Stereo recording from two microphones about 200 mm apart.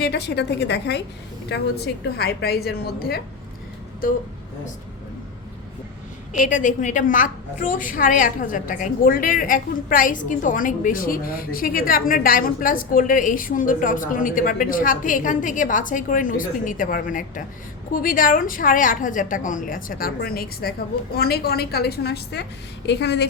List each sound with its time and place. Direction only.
0.0 s a woman's voice: 55° left (ahead or behind)
2.1 s a woman's voice: 55° left (ahead or behind)
6.3 s a woman's voice: 40° left (ahead or behind); by 23.3 s 55° left (ahead or behind)